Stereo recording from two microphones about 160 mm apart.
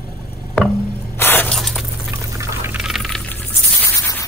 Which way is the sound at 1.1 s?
15° left (ahead or behind).